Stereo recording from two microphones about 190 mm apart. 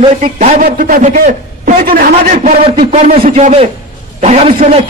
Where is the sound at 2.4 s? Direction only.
30° right (ahead or behind).